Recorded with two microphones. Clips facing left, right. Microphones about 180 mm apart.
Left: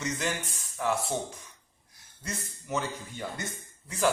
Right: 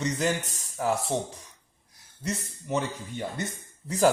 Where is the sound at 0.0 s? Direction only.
35° right (ahead or behind).